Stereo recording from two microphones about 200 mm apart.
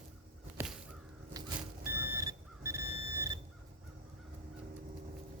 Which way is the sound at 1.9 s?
10° right (ahead or behind).